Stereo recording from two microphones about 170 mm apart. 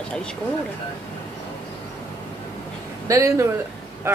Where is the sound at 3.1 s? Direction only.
20° right (ahead or behind).